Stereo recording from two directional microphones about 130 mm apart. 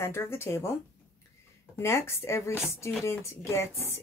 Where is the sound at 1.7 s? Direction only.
20° left (ahead or behind).